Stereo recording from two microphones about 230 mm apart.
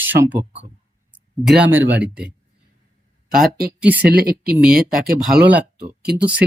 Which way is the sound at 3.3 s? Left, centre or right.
Right.